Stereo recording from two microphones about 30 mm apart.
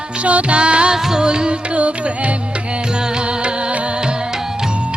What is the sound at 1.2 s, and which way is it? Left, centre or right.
Music, right.